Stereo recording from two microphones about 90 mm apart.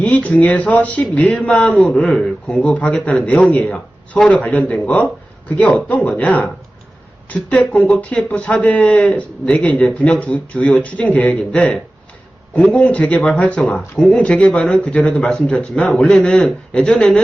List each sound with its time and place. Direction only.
0.0 s speech: 15° left (ahead or behind)